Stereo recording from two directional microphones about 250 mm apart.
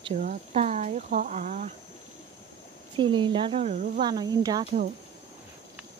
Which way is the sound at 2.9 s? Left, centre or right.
Centre.